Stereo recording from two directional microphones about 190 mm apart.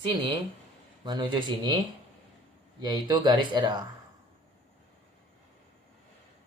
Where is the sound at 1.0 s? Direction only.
25° right (ahead or behind).